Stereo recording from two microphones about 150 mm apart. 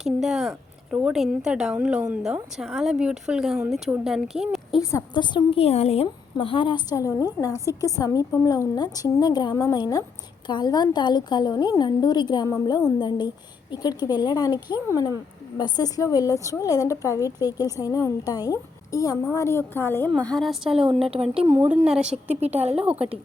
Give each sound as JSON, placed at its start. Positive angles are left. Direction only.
{"t": 0.2, "sound": "a woman's voice", "side_deg": 0}
{"t": 4.8, "sound": "a woman's voice", "side_deg": 20}
{"t": 5.1, "sound": "a woman's voice", "side_deg": 30}
{"t": 21.0, "sound": "speech", "side_deg": -40}
{"t": 21.8, "sound": "a woman's voice", "side_deg": -5}
{"t": 22.4, "sound": "speech", "side_deg": -45}